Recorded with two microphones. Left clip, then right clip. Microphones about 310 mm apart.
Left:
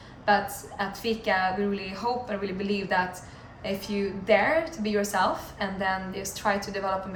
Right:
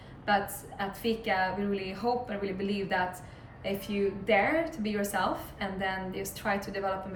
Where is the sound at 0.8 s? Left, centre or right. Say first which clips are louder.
Left 3 dB; centre.